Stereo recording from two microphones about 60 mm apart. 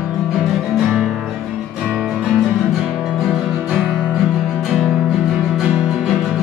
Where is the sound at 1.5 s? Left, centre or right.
Centre.